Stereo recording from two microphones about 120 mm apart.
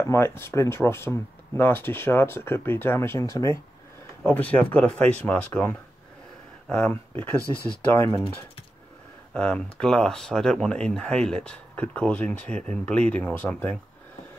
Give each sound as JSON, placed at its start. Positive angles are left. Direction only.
{"t": 0.0, "sound": "speech", "side_deg": 20}
{"t": 4.2, "sound": "speech", "side_deg": 15}
{"t": 9.3, "sound": "speech", "side_deg": 10}